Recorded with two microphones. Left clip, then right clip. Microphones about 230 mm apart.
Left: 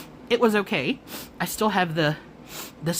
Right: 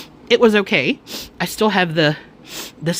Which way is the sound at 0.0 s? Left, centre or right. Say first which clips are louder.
Right 8 dB; right.